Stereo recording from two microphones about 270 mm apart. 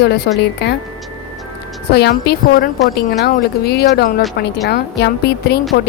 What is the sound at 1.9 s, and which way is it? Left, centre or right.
Speech, left.